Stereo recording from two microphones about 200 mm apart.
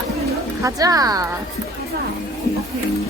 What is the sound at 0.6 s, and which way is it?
Speech, 20° right (ahead or behind).